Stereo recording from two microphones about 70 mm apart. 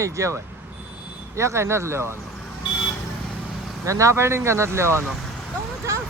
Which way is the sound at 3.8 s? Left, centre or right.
Right.